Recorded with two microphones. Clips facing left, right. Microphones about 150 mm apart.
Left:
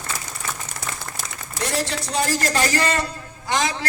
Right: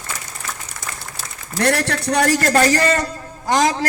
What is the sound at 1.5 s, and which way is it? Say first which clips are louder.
A man's voice: right 6 dB; 65° right (ahead or behind).